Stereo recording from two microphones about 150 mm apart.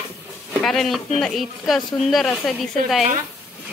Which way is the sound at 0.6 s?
Centre (ahead or behind).